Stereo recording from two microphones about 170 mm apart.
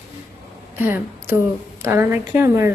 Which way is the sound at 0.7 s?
15° right (ahead or behind).